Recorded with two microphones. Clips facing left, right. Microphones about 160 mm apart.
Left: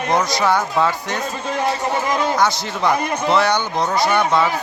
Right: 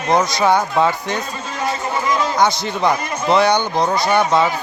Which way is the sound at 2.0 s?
55° left (ahead or behind).